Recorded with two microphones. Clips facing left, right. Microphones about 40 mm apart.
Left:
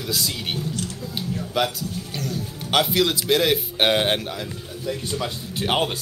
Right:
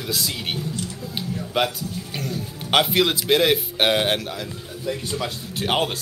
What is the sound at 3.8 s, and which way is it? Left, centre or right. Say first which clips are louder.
Speech: left 1 dB; centre.